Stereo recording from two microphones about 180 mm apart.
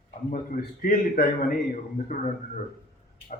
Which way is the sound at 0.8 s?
50° left (ahead or behind).